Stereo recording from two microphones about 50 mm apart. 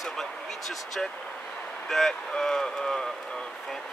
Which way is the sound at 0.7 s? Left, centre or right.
Centre.